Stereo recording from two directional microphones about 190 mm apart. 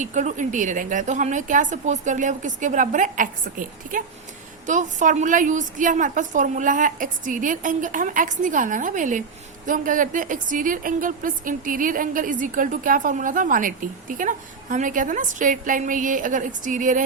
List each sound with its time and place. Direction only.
0.0 s a woman's voice: 40° right (ahead or behind)
4.6 s a woman's voice: 40° right (ahead or behind)